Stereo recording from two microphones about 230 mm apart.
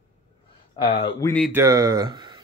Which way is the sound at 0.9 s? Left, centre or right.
Left.